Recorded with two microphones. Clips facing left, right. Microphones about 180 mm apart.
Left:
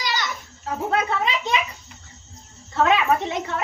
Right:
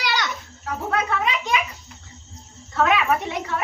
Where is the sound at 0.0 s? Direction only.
65° right (ahead or behind).